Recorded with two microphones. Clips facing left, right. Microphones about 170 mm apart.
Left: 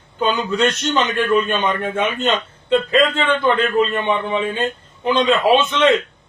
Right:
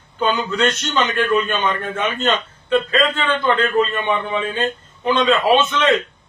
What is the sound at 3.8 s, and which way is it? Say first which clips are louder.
A man's voice: left 1 dB; 25° left (ahead or behind).